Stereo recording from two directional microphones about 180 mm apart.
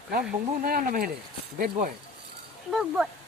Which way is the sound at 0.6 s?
50° right (ahead or behind).